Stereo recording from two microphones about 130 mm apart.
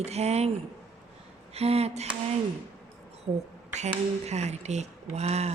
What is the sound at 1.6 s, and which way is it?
Speech, 50° right (ahead or behind).